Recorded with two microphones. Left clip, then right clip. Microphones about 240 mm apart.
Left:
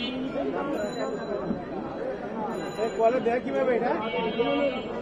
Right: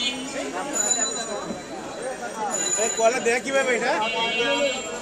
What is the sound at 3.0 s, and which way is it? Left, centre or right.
Speech, right.